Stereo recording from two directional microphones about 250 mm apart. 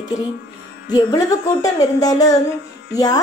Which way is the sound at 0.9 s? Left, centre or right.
Centre.